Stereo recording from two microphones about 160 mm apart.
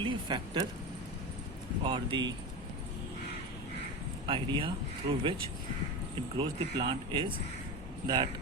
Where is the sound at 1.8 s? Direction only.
30° right (ahead or behind).